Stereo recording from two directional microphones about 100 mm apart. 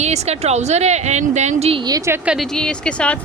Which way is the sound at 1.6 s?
80° right.